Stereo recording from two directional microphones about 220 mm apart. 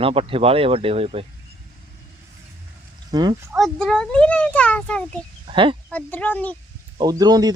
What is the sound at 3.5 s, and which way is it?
A child's voice, centre (ahead or behind).